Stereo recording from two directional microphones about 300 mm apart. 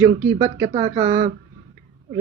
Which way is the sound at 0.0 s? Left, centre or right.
Centre.